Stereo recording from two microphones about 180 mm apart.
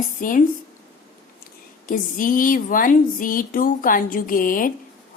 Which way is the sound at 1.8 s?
50° left (ahead or behind).